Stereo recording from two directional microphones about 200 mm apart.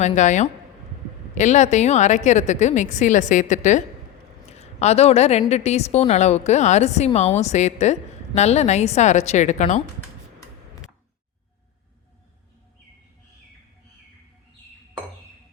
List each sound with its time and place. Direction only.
0.0 s a woman's voice: 35° left (ahead or behind)
4.4 s a sound: 30° left (ahead or behind)
5.5 s a woman's voice: 35° left (ahead or behind)